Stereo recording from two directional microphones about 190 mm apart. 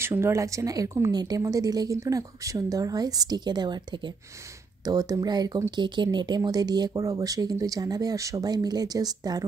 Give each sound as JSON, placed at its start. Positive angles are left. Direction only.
{"t": 0.0, "sound": "speech", "side_deg": -15}